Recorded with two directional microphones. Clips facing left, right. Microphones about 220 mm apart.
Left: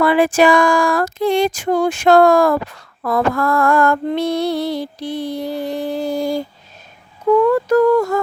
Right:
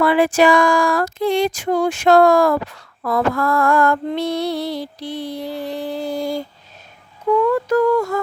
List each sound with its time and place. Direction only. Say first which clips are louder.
0.0 s female singing: left 1 dB; 50° left (ahead or behind)
7.5 s female singing: left 3 dB; 40° left (ahead or behind)